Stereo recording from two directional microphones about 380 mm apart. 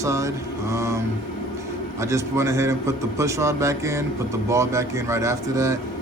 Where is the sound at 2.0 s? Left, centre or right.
Centre.